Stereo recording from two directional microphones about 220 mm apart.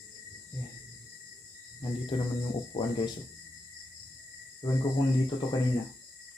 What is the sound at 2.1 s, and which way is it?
Speech, 25° left (ahead or behind).